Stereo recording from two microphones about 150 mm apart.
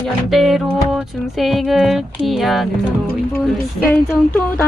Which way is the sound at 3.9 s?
5° left (ahead or behind).